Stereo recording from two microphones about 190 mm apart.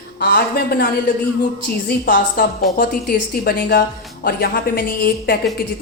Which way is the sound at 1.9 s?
50° left (ahead or behind).